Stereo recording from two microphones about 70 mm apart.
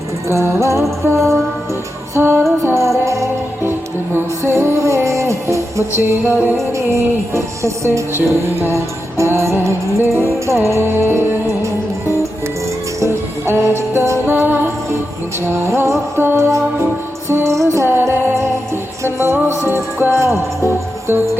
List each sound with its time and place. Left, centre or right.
0.3 s music: right
2.1 s music: right
2.6 s music: right
3.6 s music: right
6.3 s music: right
13.0 s music: right
15.6 s music: right